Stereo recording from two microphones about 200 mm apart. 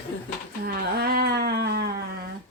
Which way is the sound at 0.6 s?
50° right (ahead or behind).